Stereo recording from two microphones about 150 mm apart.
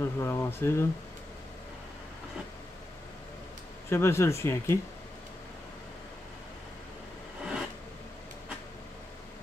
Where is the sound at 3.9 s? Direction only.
15° left (ahead or behind).